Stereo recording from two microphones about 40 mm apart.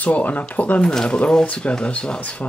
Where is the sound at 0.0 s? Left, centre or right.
Left.